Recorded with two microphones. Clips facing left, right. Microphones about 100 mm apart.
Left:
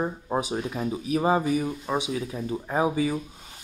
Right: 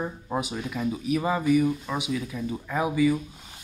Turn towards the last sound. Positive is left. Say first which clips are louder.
# right 1 dB
turn(degrees=35)  # may be behind; listen again after turning